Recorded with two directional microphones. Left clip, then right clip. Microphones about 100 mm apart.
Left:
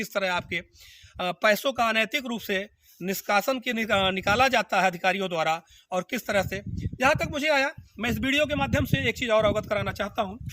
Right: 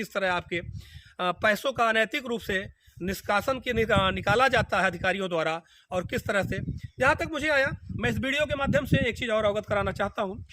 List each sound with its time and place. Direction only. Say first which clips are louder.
0.0 s a man's voice: left 1 dB; 40° right (ahead or behind)